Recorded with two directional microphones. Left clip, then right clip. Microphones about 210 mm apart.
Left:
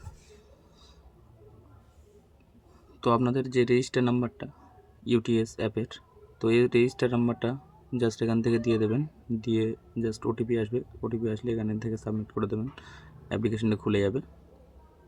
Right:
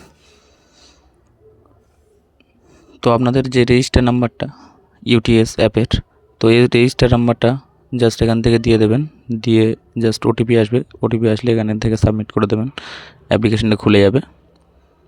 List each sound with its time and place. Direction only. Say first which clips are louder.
2.7 s speech: right 11 dB; 35° right (ahead or behind)